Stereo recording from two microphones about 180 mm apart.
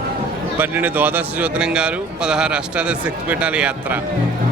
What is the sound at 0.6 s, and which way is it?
Speech, 10° right (ahead or behind).